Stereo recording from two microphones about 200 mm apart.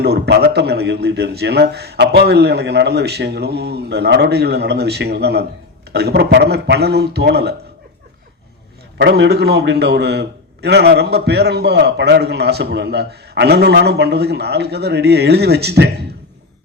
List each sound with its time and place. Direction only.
0.0 s a man's voice: 55° right (ahead or behind)
9.0 s a man's voice: 60° right (ahead or behind)